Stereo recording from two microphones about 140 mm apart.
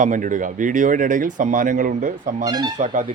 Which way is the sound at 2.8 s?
65° right (ahead or behind).